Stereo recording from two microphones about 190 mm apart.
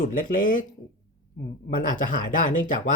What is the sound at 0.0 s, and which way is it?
Speech, 45° left (ahead or behind).